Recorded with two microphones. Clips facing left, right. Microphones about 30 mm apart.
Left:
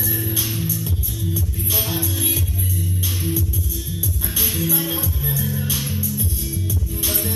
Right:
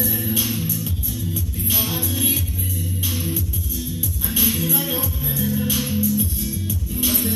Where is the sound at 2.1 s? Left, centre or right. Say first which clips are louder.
Right 1 dB; centre.